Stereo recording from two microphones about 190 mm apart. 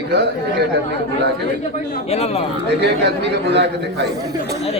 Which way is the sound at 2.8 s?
65° right (ahead or behind).